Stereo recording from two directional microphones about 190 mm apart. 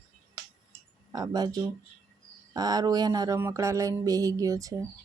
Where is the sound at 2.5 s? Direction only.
20° right (ahead or behind).